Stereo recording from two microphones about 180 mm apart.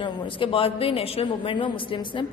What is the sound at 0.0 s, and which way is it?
Speech, 30° left (ahead or behind).